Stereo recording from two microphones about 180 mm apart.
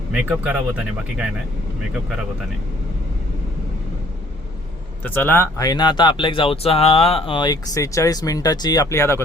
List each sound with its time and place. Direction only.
0.1 s speech: 10° right (ahead or behind)
5.0 s speech: 10° left (ahead or behind)